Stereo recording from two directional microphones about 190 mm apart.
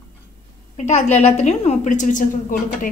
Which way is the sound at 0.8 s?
35° left (ahead or behind).